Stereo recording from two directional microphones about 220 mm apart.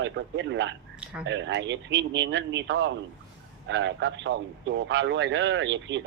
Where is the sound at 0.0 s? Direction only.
55° right (ahead or behind).